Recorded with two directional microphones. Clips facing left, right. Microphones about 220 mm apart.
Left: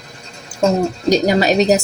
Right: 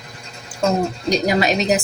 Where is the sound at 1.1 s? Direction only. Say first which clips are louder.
Left 4 dB; 35° left (ahead or behind).